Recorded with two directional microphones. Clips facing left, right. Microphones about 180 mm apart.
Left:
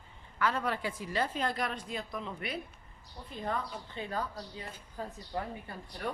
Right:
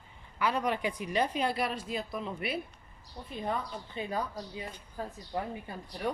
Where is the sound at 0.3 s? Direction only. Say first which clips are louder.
Right 2 dB; 15° right (ahead or behind).